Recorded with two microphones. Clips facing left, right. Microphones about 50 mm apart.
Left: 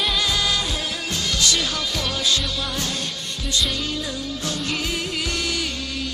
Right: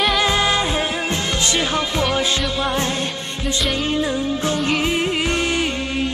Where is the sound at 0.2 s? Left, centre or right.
Right.